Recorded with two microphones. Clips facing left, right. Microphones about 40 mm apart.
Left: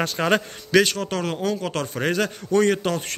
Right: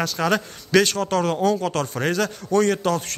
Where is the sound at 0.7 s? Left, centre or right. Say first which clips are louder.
Right 1 dB; centre.